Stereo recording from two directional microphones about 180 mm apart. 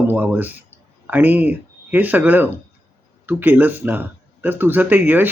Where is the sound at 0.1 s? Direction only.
10° right (ahead or behind).